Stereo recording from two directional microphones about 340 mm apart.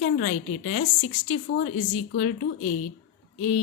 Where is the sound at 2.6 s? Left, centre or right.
Left.